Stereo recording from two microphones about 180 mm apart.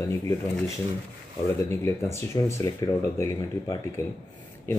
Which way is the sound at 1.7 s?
15° left (ahead or behind).